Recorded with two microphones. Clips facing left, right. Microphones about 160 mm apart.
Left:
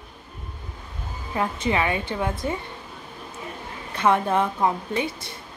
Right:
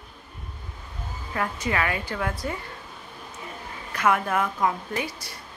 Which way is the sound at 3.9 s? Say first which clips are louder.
Left 3 dB; 25° left (ahead or behind).